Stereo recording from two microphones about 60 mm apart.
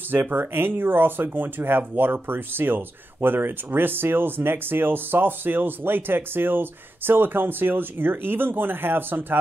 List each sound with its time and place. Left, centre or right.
0.1 s speech: right